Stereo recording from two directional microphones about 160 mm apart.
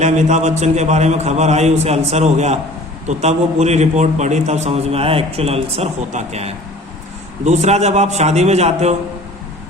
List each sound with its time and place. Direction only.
0.0 s a man's voice: 50° right (ahead or behind)